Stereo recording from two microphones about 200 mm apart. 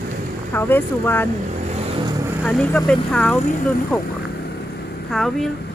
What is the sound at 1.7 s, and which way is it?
Vehicle, 30° right (ahead or behind).